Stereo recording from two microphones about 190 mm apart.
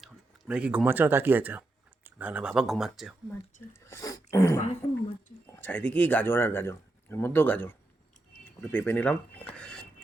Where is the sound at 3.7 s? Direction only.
15° left (ahead or behind).